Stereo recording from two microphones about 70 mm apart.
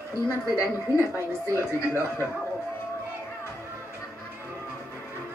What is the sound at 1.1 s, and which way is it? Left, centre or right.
A woman's voice, left.